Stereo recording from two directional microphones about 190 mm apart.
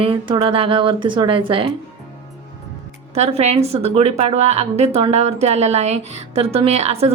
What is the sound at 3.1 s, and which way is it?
A woman's voice, 35° right (ahead or behind).